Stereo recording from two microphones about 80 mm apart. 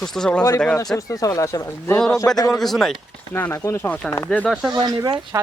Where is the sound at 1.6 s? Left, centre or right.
Left.